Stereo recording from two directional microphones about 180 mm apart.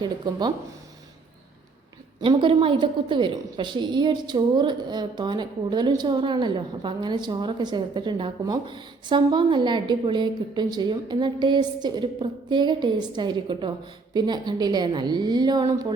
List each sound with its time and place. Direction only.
0.0 s a woman's voice: 25° right (ahead or behind)
2.2 s a woman's voice: 30° right (ahead or behind)